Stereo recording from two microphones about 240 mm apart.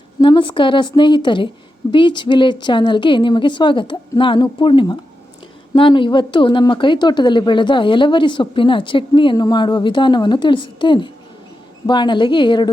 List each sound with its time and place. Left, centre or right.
0.2 s a woman's voice: centre